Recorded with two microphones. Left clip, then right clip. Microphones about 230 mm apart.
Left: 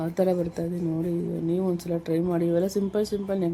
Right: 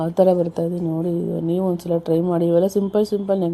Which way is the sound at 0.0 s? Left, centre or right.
Centre.